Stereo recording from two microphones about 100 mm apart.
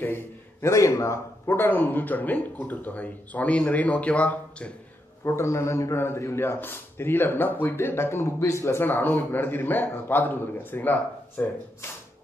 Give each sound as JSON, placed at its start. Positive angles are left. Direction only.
{"t": 0.0, "sound": "a man's voice", "side_deg": 25}
{"t": 5.2, "sound": "a man's voice", "side_deg": 30}